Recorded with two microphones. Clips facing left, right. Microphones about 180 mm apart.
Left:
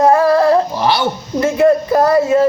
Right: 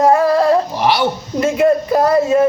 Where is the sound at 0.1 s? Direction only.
20° right (ahead or behind).